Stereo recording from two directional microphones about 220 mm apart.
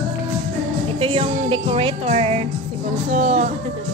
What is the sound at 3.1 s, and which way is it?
Speech, 35° right (ahead or behind).